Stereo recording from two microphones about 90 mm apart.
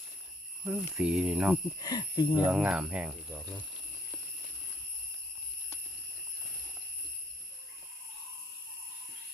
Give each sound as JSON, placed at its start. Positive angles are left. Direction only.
{"t": 0.6, "sound": "speech", "side_deg": -15}
{"t": 1.8, "sound": "speech", "side_deg": 50}
{"t": 2.3, "sound": "speech", "side_deg": -15}